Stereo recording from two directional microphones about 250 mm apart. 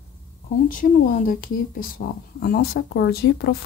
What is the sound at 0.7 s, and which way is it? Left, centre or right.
Speech, left.